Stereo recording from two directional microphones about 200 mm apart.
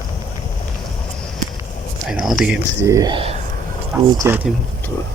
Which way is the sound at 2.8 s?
15° right (ahead or behind).